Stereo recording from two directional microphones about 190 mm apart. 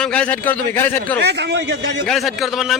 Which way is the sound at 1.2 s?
60° right (ahead or behind).